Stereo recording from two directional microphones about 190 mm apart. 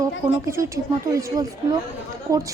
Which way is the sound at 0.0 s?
15° right (ahead or behind).